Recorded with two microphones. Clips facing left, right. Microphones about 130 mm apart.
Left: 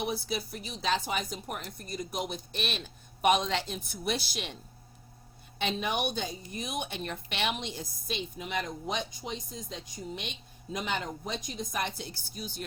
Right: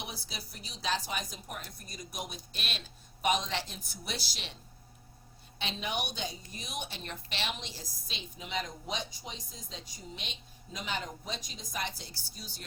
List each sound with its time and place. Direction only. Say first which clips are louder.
0.0 s a woman's voice: left 11 dB; 55° left (ahead or behind)
5.5 s a woman's voice: left 5 dB; 55° left (ahead or behind)